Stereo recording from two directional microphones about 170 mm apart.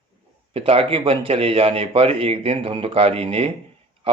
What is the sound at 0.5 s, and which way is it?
A man's voice, 35° right (ahead or behind).